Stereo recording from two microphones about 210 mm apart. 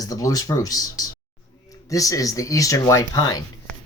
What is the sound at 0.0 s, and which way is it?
Speech, 15° left (ahead or behind).